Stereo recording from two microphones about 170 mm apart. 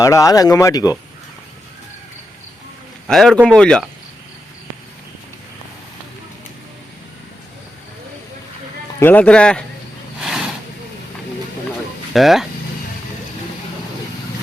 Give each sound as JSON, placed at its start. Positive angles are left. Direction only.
{"t": 0.0, "sound": "speech", "side_deg": 20}
{"t": 3.1, "sound": "speech", "side_deg": 0}
{"t": 9.0, "sound": "a man's voice", "side_deg": 10}
{"t": 12.1, "sound": "speech", "side_deg": 0}